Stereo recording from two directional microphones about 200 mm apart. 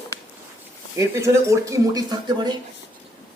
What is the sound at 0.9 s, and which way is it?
Speech, 15° right (ahead or behind).